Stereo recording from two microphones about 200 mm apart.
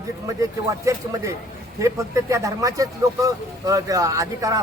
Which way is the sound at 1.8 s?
15° right (ahead or behind).